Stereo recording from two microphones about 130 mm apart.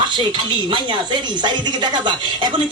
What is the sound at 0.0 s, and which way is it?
Speech, 35° right (ahead or behind).